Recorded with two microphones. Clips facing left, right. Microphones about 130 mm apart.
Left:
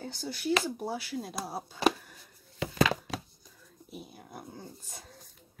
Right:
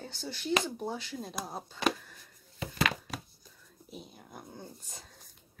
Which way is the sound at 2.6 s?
85° left.